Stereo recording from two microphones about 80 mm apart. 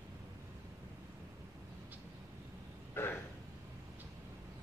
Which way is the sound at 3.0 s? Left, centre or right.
Left.